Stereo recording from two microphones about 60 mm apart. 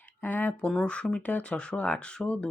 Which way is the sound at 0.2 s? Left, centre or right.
Left.